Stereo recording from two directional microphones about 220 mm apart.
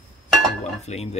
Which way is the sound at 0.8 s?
30° left (ahead or behind).